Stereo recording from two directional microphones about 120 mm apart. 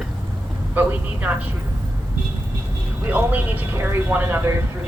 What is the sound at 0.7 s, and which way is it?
Speech, 15° right (ahead or behind).